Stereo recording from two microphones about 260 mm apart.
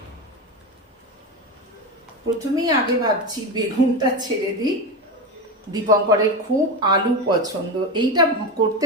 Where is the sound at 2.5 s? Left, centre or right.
Centre.